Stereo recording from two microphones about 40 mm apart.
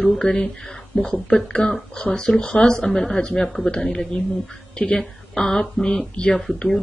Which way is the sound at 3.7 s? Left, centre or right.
Left.